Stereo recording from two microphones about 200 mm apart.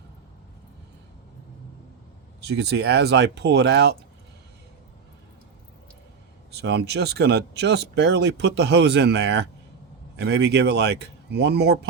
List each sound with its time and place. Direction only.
2.4 s speech: 55° right (ahead or behind)
6.6 s speech: 55° right (ahead or behind)